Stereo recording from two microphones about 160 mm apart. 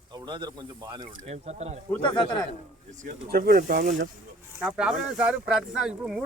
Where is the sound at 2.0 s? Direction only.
30° left (ahead or behind).